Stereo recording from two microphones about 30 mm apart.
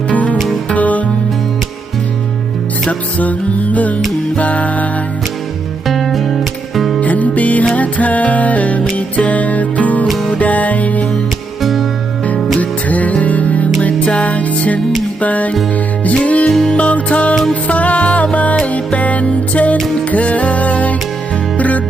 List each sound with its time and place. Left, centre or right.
0.1 s music: left
3.2 s music: left
5.9 s music: centre
7.0 s music: left
11.6 s music: centre
12.5 s music: left
16.5 s music: left
16.7 s music: left